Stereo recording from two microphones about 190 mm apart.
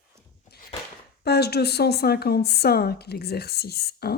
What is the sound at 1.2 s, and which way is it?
Speech, 60° left (ahead or behind).